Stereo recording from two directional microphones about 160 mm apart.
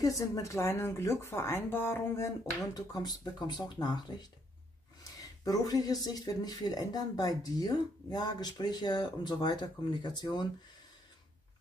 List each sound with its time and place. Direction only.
0.0 s speech: 20° left (ahead or behind)
5.2 s speech: 20° left (ahead or behind)